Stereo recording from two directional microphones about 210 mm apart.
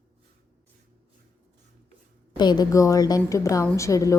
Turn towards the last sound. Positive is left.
turn(degrees=15)  # may be behind; listen again after turning